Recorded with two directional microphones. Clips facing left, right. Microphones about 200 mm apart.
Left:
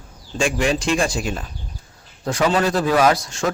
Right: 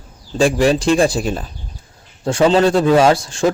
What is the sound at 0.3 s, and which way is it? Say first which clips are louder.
A man's voice: right 6 dB; 35° right (ahead or behind).